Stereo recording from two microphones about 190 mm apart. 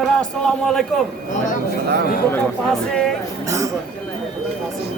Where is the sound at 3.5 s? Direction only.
15° right (ahead or behind).